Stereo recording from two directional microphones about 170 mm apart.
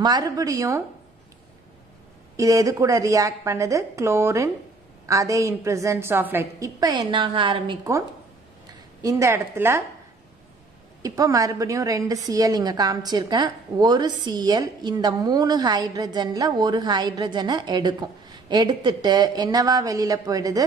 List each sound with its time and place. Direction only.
0.0 s a woman's voice: 20° right (ahead or behind)
2.3 s a woman's voice: 20° right (ahead or behind)
9.0 s a woman's voice: 15° right (ahead or behind)
11.0 s a woman's voice: 20° right (ahead or behind)